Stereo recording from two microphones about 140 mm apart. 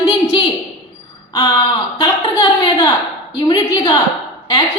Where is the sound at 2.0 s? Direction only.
30° left (ahead or behind).